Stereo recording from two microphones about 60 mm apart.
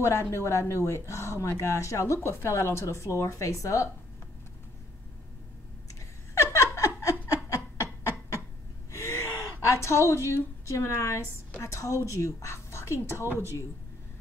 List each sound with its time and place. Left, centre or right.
0.0 s speech: left
6.3 s a sound: left
7.4 s chuckle: left
8.9 s speech: left
13.2 s speech: right